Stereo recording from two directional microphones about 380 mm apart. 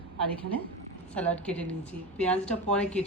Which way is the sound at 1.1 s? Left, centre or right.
Centre.